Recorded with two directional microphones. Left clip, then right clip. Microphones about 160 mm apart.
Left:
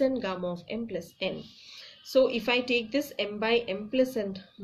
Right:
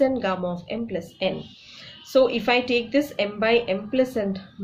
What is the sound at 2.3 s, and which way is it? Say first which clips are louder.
A woman's voice: right 5 dB; 25° left (ahead or behind).